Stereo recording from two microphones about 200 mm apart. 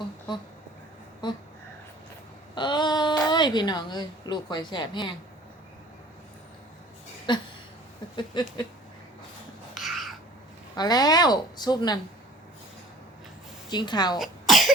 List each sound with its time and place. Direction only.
0.3 s a woman's voice: 20° left (ahead or behind)
2.6 s a sound: 20° left (ahead or behind)
3.2 s a woman's voice: 20° left (ahead or behind)
7.3 s a woman's voice: 20° left (ahead or behind)
9.7 s a sound: centre (ahead or behind)
10.8 s a woman's voice: 20° left (ahead or behind)
13.7 s a woman's voice: 20° left (ahead or behind)
14.2 s cough: centre (ahead or behind)